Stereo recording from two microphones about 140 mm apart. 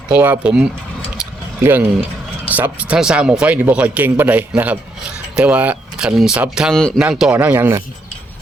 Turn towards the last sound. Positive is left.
turn(degrees=-15)  # may be behind; listen again after turning